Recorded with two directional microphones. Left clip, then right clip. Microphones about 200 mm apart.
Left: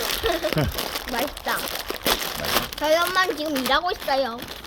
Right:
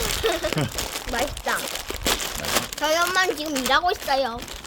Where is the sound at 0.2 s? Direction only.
20° right (ahead or behind).